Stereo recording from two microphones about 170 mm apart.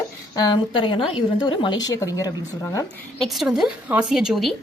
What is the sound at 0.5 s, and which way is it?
Speech, 30° left (ahead or behind).